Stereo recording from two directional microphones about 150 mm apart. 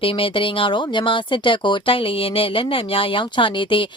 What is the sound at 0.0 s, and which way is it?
Speech, 35° left (ahead or behind).